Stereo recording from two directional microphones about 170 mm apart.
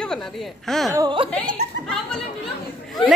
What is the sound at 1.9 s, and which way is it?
Speech, 5° left (ahead or behind).